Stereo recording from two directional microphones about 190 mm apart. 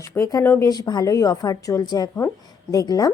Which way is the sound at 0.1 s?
15° left (ahead or behind).